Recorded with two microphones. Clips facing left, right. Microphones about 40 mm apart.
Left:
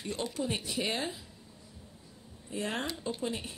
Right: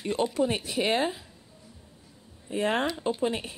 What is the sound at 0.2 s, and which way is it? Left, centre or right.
Speech, right.